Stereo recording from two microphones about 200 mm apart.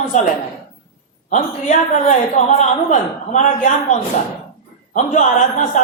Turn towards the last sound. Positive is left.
turn(degrees=40)  # may be behind; listen again after turning